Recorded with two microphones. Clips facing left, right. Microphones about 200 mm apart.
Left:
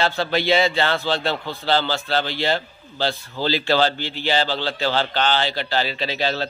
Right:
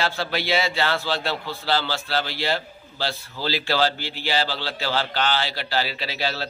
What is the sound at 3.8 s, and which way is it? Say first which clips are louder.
A man's voice: left 3 dB; 5° right (ahead or behind).